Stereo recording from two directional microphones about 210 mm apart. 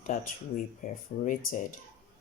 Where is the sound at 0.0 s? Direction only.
40° left (ahead or behind).